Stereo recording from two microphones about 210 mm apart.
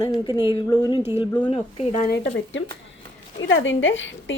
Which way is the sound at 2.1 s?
50° left (ahead or behind).